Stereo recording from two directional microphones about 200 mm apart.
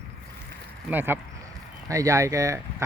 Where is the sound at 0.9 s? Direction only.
10° right (ahead or behind).